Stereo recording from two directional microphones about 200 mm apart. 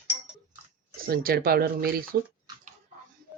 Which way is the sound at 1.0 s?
50° right (ahead or behind).